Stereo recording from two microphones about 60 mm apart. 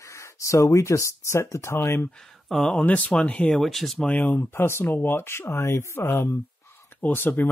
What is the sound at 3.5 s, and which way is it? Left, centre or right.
Speech, centre.